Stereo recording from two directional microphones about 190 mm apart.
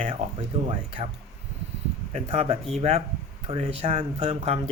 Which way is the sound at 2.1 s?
30° right (ahead or behind).